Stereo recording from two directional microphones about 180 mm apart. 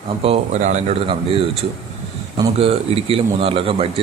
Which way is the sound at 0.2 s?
35° right (ahead or behind).